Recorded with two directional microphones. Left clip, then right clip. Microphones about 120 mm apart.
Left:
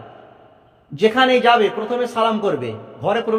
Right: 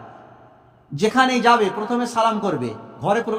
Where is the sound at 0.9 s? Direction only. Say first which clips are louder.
Left 3 dB; 15° right (ahead or behind).